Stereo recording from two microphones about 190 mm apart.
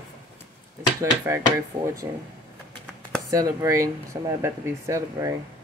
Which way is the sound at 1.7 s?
15° right (ahead or behind).